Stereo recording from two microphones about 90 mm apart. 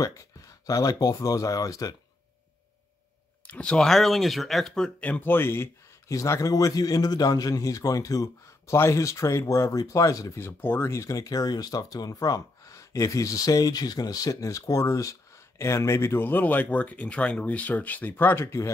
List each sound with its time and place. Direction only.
0.0 s speech: 40° left (ahead or behind)
3.4 s speech: 15° left (ahead or behind)
5.0 s speech: 20° left (ahead or behind); by 10.4 s 40° left (ahead or behind)
10.4 s speech: 25° left (ahead or behind)